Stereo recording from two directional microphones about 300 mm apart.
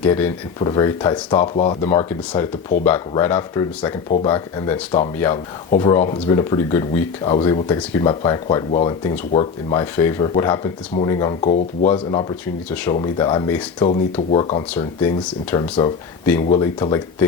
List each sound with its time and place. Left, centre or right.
0.0 s speech: centre
12.7 s speech: centre
14.7 s speech: centre